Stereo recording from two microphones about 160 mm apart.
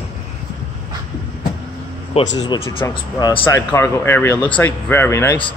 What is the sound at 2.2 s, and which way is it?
Speech, 40° left (ahead or behind).